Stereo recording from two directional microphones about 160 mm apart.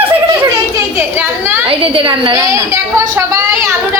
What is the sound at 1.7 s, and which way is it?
Speech, 35° right (ahead or behind).